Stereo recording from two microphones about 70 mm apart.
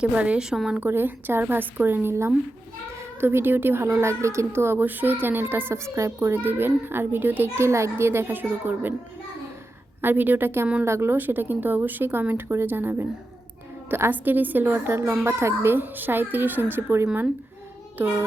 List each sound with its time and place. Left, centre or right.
0.0 s a woman's voice: centre
0.8 s a woman's voice: right
7.5 s a woman's voice: right
10.0 s a woman's voice: right